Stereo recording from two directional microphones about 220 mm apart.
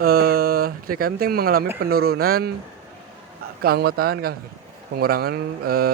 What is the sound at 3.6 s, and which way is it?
Speech, 45° right (ahead or behind).